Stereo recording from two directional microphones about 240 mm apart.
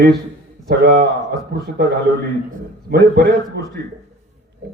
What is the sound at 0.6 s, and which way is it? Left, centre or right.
Speech, right.